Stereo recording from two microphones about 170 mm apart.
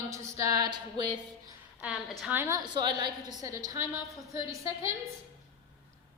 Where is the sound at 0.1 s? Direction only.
20° right (ahead or behind).